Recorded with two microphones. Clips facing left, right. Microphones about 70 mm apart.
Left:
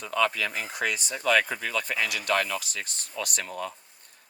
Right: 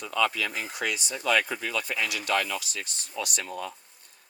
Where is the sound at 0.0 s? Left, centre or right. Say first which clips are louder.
Left 1 dB; left.